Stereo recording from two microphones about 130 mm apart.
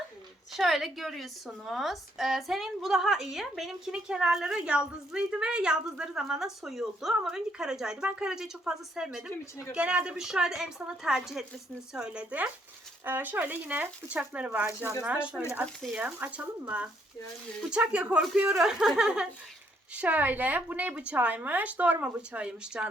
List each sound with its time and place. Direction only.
0.5 s a woman's voice: centre (ahead or behind)
14.7 s speech: 20° right (ahead or behind)
15.0 s a woman's voice: 10° right (ahead or behind)